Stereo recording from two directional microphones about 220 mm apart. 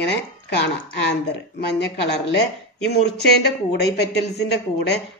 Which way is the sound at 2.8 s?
50° left (ahead or behind).